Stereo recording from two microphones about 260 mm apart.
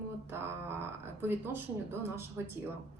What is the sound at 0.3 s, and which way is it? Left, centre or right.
A woman's voice, centre.